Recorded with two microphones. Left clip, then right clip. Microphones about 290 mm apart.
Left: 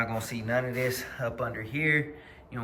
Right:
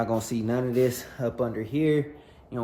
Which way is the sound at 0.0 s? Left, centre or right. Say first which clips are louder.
Right 4 dB; centre.